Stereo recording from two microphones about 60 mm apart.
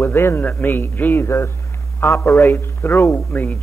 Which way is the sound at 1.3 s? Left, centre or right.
Left.